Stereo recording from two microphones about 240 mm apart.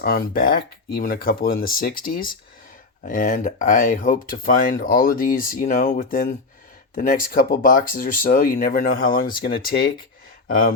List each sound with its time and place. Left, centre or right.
0.0 s speech: left
10.5 s speech: left